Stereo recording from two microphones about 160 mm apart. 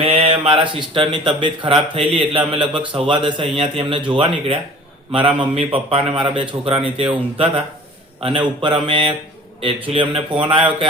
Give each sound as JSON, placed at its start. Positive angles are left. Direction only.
{"t": 0.0, "sound": "speech", "side_deg": -40}
{"t": 8.6, "sound": "speech", "side_deg": -30}